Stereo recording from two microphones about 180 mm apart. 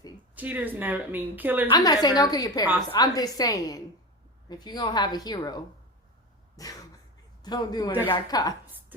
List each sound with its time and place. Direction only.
0.3 s a woman's voice: 10° right (ahead or behind)
1.7 s a woman's voice: 20° left (ahead or behind)
6.6 s a sound: 20° left (ahead or behind)
7.4 s a woman's voice: 25° left (ahead or behind)